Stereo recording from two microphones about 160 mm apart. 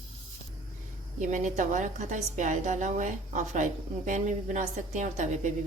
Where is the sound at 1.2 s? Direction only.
50° right (ahead or behind).